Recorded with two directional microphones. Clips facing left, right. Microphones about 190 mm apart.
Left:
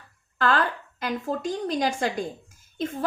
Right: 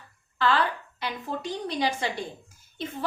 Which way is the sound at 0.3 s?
50° left (ahead or behind).